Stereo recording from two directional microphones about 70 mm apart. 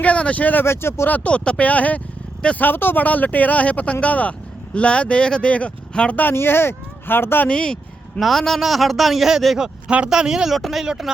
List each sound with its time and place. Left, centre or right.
0.0 s speech: centre
0.6 s speech: left
1.1 s speech: centre
6.1 s speech: left
7.4 s speech: centre